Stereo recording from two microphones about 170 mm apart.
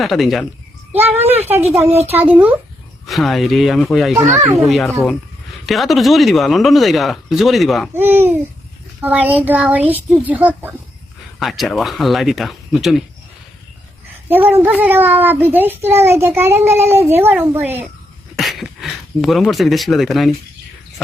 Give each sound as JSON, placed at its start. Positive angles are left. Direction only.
{"t": 0.0, "sound": "speech", "side_deg": 0}
{"t": 1.3, "sound": "a woman's voice", "side_deg": -10}
{"t": 7.9, "sound": "a child's voice", "side_deg": -10}
{"t": 14.3, "sound": "a child's voice", "side_deg": -10}
{"t": 18.3, "sound": "speech", "side_deg": 0}